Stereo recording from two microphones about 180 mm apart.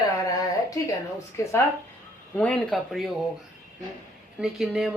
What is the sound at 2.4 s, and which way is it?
Speech, 5° left (ahead or behind).